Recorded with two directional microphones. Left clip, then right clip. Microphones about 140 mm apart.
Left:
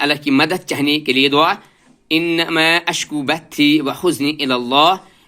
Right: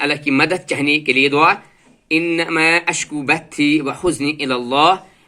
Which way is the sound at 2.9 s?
15° left (ahead or behind).